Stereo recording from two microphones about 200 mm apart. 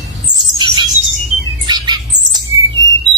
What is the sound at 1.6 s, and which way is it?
Bird, 20° right (ahead or behind).